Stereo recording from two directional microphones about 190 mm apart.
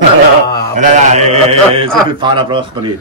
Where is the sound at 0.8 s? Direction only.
40° right (ahead or behind).